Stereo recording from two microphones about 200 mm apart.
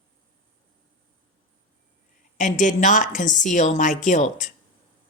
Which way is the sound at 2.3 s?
40° left (ahead or behind).